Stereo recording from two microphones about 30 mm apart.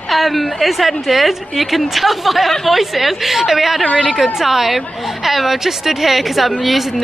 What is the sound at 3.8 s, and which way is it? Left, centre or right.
Speech, left.